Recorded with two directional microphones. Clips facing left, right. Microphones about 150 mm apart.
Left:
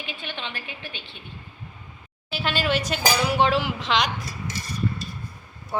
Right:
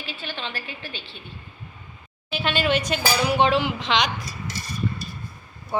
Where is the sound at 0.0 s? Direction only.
20° left (ahead or behind).